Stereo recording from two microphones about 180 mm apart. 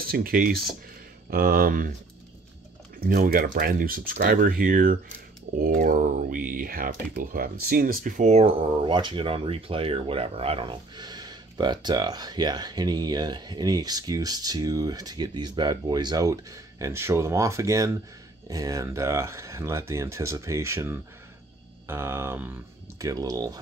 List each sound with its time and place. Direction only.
0.0 s speech: 55° right (ahead or behind)
3.0 s speech: 55° right (ahead or behind); by 23.6 s 20° right (ahead or behind)